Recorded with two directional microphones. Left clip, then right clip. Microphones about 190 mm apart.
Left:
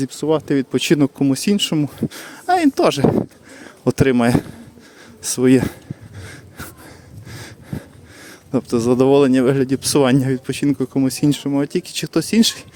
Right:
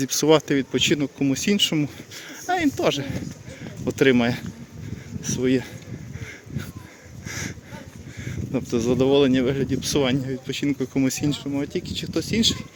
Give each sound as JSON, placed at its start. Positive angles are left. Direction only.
{"t": 0.1, "sound": "speech", "side_deg": 10}
{"t": 0.4, "sound": "speech", "side_deg": 25}
{"t": 7.3, "sound": "a sound", "side_deg": 10}
{"t": 8.2, "sound": "speech", "side_deg": 30}
{"t": 10.2, "sound": "speech", "side_deg": 55}
{"t": 10.9, "sound": "speech", "side_deg": 25}
{"t": 11.3, "sound": "speech", "side_deg": 45}